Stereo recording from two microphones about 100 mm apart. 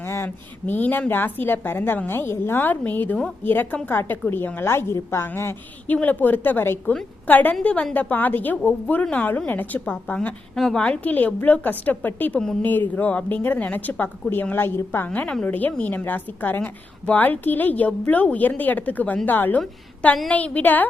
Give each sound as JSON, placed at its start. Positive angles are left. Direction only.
{"t": 0.0, "sound": "a sound", "side_deg": 25}
{"t": 0.7, "sound": "a woman's voice", "side_deg": 15}
{"t": 10.2, "sound": "a woman's voice", "side_deg": 5}